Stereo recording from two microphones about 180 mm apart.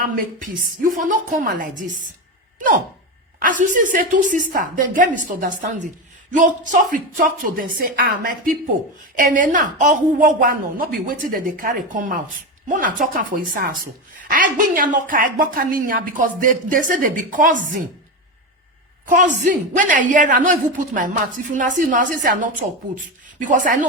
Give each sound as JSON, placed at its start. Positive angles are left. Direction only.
{"t": 0.0, "sound": "a woman's voice", "side_deg": -50}
{"t": 3.4, "sound": "a woman's voice", "side_deg": -45}
{"t": 19.0, "sound": "a woman's voice", "side_deg": -45}